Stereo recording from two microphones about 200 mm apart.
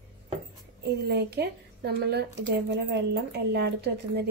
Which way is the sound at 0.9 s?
55° right (ahead or behind).